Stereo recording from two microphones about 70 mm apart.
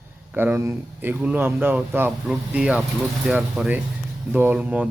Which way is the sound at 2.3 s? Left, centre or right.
Centre.